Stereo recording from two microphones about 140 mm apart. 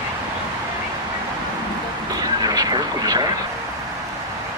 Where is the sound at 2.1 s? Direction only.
25° right (ahead or behind).